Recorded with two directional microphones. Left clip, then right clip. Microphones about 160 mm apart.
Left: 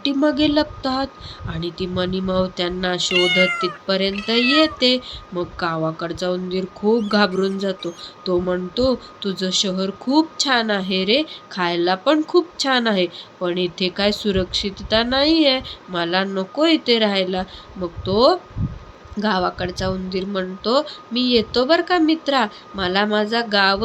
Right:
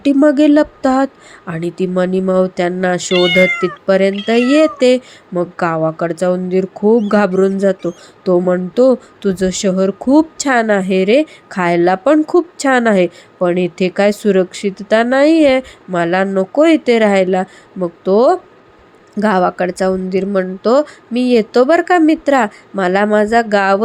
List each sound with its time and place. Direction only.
0.0 s a woman's voice: 45° right (ahead or behind)